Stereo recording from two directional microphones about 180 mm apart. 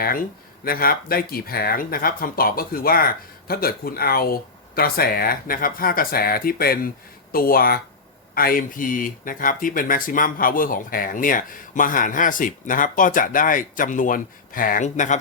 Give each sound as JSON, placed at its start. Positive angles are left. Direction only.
{"t": 0.0, "sound": "speech", "side_deg": 55}